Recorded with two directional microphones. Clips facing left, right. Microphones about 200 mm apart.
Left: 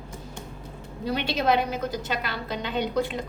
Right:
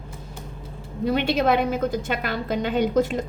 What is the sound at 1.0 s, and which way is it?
A woman's voice, 50° right (ahead or behind).